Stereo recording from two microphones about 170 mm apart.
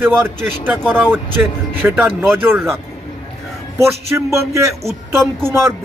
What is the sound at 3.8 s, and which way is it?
Speech, 15° right (ahead or behind).